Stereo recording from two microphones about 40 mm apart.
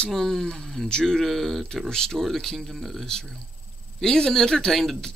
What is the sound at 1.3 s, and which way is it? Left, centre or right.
Speech, centre.